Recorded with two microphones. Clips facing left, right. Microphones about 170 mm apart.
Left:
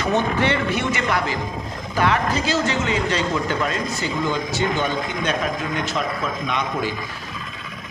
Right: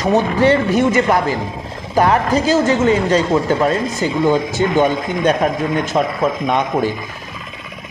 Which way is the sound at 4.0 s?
50° right (ahead or behind).